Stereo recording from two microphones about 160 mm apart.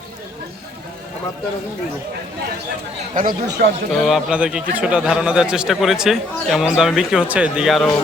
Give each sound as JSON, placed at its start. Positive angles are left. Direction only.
{"t": 3.2, "sound": "speech", "side_deg": -75}
{"t": 4.0, "sound": "a man's voice", "side_deg": -5}